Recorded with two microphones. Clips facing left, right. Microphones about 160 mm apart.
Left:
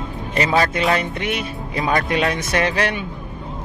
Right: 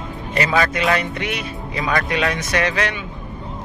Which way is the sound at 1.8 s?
30° left (ahead or behind).